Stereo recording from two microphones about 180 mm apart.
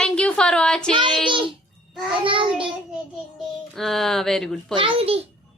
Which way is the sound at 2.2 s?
30° right (ahead or behind).